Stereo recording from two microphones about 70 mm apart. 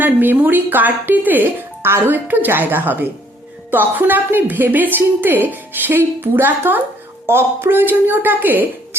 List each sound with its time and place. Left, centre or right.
0.0 s a woman's voice: right